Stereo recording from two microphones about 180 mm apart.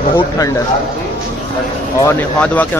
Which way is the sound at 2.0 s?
10° left (ahead or behind).